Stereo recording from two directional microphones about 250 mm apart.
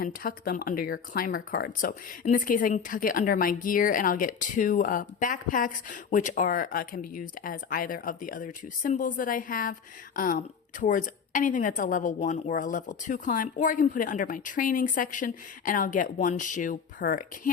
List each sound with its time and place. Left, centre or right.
0.0 s a woman's voice: left